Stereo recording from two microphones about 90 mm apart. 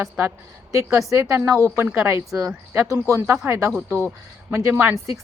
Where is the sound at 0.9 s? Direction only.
35° right (ahead or behind).